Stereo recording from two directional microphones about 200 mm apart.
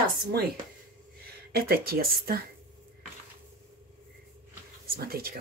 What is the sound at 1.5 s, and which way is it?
Speech, 50° right (ahead or behind).